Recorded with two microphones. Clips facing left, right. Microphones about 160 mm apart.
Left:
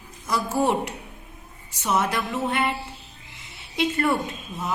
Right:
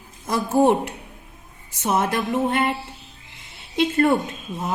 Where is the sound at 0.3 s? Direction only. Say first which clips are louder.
Right 5 dB; 55° right (ahead or behind).